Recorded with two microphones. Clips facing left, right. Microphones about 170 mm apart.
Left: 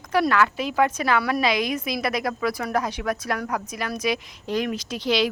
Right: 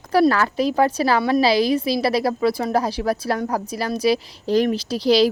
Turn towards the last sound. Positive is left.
turn(degrees=-35)  # may be behind; listen again after turning